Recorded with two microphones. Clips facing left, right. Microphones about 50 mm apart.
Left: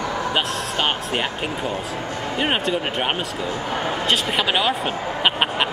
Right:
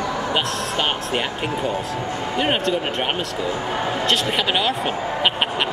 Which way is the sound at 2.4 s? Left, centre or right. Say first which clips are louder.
Right 1 dB; centre.